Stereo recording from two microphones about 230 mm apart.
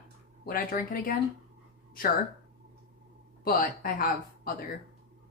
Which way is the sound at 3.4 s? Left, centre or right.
Left.